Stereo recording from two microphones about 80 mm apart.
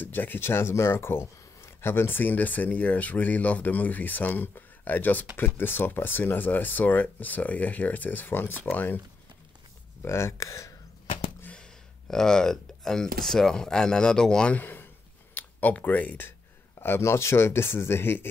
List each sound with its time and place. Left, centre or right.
0.0 s speech: left
10.0 s speech: left
11.5 s speech: centre
14.6 s a sound: left
15.3 s speech: left